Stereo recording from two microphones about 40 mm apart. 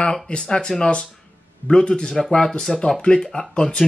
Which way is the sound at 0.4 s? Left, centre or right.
Centre.